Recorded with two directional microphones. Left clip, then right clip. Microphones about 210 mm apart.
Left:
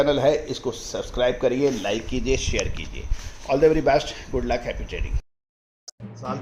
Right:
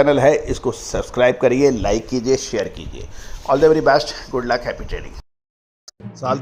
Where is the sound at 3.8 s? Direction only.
10° right (ahead or behind).